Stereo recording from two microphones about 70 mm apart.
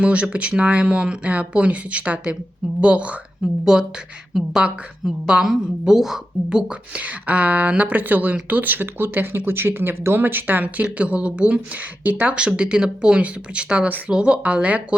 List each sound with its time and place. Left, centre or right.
0.0 s a woman's voice: centre